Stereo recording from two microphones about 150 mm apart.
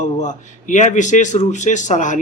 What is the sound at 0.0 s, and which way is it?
Speech, 55° left (ahead or behind).